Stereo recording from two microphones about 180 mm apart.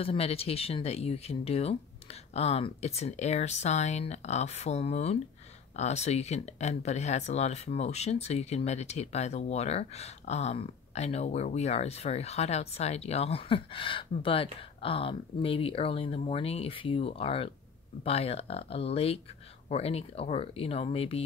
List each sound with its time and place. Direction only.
0.0 s speech: 35° left (ahead or behind)